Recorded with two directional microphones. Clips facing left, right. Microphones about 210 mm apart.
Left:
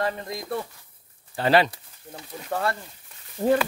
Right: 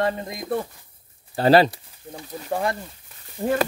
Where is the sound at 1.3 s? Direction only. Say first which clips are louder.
Right 4 dB; 35° right (ahead or behind).